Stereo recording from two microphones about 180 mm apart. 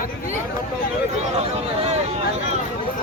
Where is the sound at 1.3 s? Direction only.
35° right (ahead or behind).